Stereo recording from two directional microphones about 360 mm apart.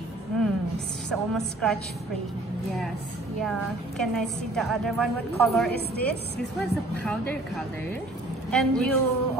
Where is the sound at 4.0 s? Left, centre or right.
Centre.